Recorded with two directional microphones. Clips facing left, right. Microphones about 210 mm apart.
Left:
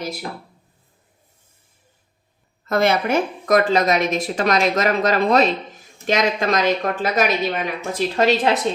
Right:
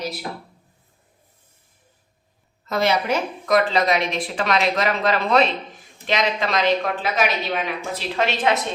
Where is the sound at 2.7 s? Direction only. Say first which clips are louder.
Left 3 dB; 50° left (ahead or behind).